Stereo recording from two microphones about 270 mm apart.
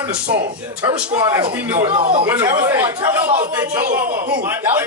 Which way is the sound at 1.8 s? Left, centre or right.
Right.